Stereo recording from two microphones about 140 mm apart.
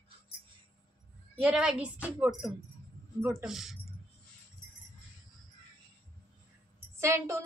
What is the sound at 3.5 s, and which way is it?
Speech, centre (ahead or behind).